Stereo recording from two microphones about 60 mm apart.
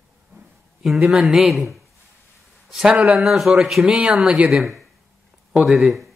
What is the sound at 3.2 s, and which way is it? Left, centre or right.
Speech, centre.